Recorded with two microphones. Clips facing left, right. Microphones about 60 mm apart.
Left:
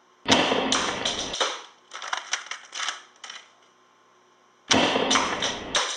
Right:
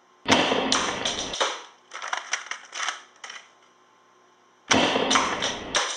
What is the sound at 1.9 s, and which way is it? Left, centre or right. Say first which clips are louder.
Crushing: right 1 dB; centre.